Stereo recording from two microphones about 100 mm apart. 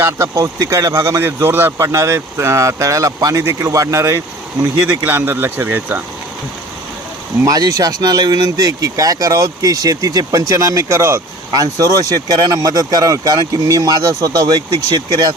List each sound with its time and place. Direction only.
0.0 s speech: 30° right (ahead or behind)
7.4 s speech: 40° right (ahead or behind)